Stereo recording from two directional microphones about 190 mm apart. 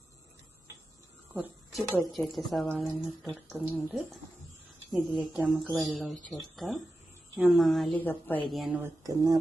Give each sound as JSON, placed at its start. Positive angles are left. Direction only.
{"t": 1.3, "sound": "a woman's voice", "side_deg": -5}
{"t": 9.0, "sound": "speech", "side_deg": -20}